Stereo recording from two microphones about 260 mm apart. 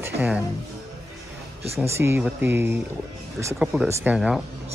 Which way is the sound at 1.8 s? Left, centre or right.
Centre.